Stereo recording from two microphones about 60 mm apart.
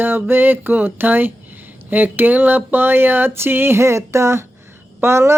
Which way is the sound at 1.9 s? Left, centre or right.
Right.